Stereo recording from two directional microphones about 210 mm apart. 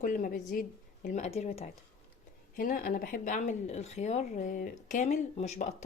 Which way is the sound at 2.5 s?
45° left (ahead or behind).